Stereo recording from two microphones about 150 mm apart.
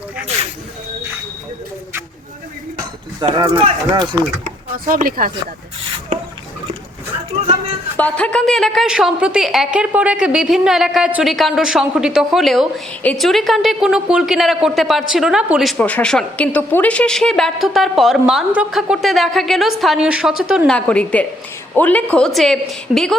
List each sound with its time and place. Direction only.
3.3 s speech: 30° right (ahead or behind)
4.7 s speech: 70° right (ahead or behind)
6.1 s a sound: 60° right (ahead or behind)
7.9 s speech: 10° left (ahead or behind)
15.8 s speech: 10° left (ahead or behind)
20.7 s a woman's voice: 5° left (ahead or behind)